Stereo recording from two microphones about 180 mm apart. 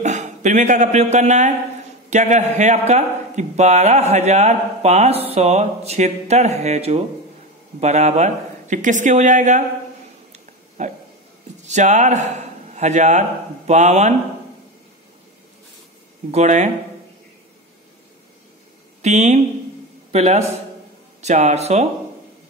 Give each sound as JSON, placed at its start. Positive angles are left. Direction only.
{"t": 0.0, "sound": "a man's voice", "side_deg": -40}
{"t": 10.8, "sound": "a man's voice", "side_deg": -40}
{"t": 16.3, "sound": "a man's voice", "side_deg": -40}
{"t": 19.0, "sound": "a man's voice", "side_deg": -40}